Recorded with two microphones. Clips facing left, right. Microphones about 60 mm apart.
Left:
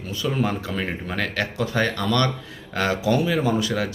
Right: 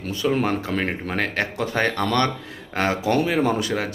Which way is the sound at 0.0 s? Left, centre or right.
Right.